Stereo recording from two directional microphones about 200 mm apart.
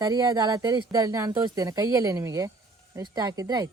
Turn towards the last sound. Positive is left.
turn(degrees=-20)  # may be behind; listen again after turning